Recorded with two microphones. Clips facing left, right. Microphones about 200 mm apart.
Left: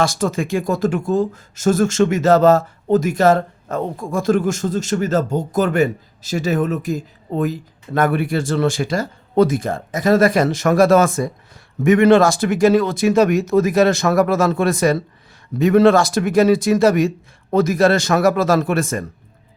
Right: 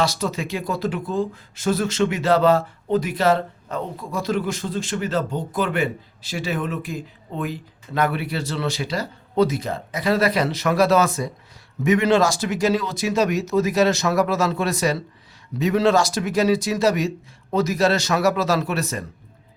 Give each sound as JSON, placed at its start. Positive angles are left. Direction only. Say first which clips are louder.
{"t": 0.0, "sound": "speech", "louder": "left 4 dB", "side_deg": 50}